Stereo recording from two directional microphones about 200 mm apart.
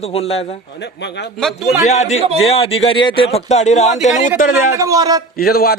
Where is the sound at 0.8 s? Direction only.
60° left (ahead or behind).